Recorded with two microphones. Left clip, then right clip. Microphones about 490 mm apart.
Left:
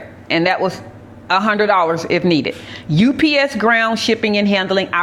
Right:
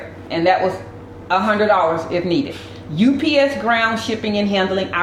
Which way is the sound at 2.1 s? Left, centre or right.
Left.